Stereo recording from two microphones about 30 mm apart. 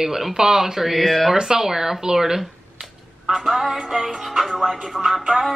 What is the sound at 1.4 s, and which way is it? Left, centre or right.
Music, centre.